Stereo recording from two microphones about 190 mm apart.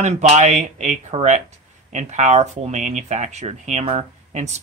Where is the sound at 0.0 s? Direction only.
35° right (ahead or behind).